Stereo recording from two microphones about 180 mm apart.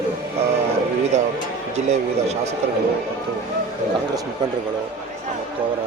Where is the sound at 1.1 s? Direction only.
40° right (ahead or behind).